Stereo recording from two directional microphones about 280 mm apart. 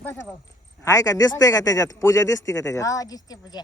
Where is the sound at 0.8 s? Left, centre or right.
Centre.